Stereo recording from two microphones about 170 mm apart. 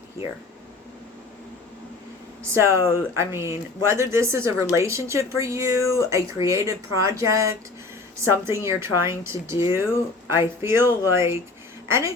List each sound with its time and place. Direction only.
2.4 s a woman's voice: 15° right (ahead or behind)